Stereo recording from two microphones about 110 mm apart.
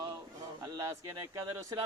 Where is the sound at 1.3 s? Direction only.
25° right (ahead or behind).